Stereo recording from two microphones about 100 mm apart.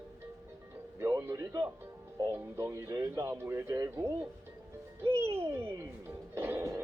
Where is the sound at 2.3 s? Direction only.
30° right (ahead or behind).